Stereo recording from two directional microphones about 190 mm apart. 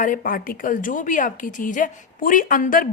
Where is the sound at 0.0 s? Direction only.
45° left (ahead or behind).